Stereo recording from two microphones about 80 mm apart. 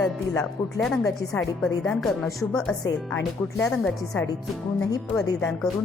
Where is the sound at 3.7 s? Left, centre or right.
Centre.